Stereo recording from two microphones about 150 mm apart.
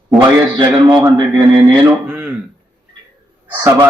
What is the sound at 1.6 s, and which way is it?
Speech, 25° right (ahead or behind).